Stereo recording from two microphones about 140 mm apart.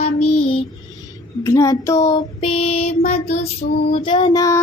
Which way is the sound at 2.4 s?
45° left (ahead or behind).